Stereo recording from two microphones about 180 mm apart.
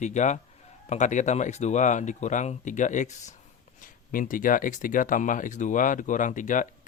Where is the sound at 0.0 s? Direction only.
40° left (ahead or behind).